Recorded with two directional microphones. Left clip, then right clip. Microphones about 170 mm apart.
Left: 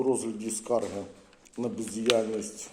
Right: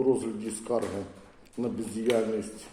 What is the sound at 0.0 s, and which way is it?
Speech, 40° left (ahead or behind).